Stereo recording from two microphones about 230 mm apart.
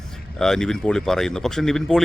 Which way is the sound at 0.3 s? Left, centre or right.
Centre.